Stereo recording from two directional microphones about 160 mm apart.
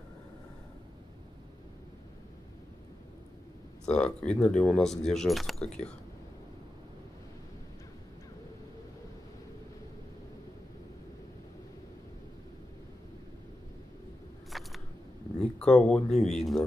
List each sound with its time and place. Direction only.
3.8 s speech: 5° left (ahead or behind)
14.5 s single-lens reflex camera: centre (ahead or behind)
15.6 s speech: 5° left (ahead or behind)